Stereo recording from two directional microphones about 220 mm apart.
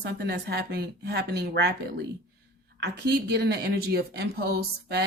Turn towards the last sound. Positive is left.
turn(degrees=-50)  # may be behind; listen again after turning